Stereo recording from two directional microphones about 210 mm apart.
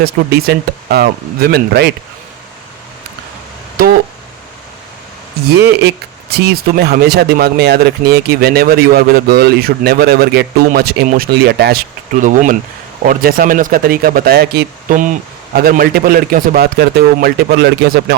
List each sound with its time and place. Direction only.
0.0 s speech: 50° right (ahead or behind)
3.8 s a sound: 45° right (ahead or behind)
5.5 s speech: 50° right (ahead or behind)